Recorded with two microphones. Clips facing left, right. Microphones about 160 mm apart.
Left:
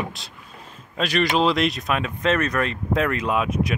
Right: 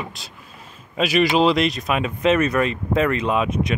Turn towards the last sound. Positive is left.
turn(degrees=0)  # may be behind; listen again after turning